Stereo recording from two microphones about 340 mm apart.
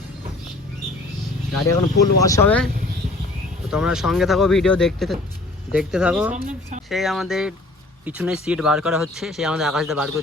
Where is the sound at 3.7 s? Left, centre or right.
Centre.